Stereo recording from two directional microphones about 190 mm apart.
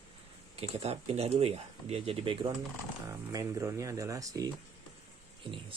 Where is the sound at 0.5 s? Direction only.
35° right (ahead or behind).